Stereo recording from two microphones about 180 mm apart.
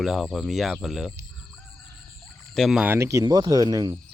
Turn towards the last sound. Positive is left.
turn(degrees=-20)  # may be behind; listen again after turning